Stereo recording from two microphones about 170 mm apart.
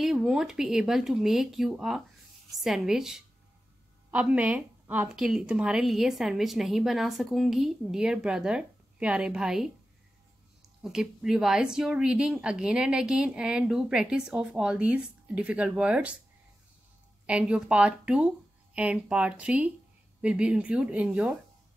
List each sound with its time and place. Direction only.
0.0 s a woman's voice: 5° right (ahead or behind)
10.8 s a woman's voice: 5° right (ahead or behind)
17.3 s speech: 5° right (ahead or behind)